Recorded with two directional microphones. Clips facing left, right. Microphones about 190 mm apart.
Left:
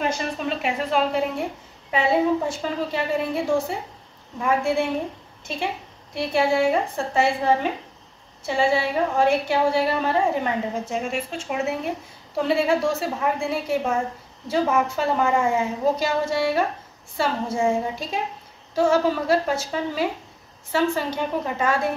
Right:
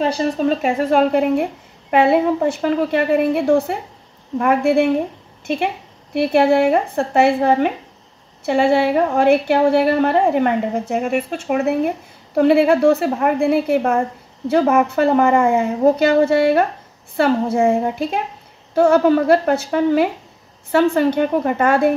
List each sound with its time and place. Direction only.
0.0 s a woman's voice: 35° right (ahead or behind); by 4.8 s 60° right (ahead or behind)
6.1 s a woman's voice: 60° right (ahead or behind)